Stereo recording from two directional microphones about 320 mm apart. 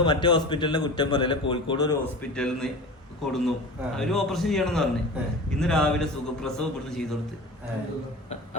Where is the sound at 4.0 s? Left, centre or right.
Centre.